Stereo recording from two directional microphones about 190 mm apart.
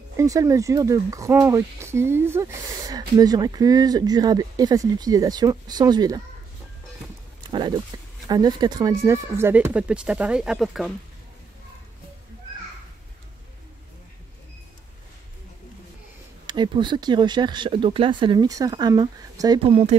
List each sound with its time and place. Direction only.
0.2 s speech: 15° right (ahead or behind)
7.9 s a sound: 20° right (ahead or behind)
8.3 s speech: 20° right (ahead or behind); by 10.9 s centre (ahead or behind)
16.4 s speech: 25° right (ahead or behind)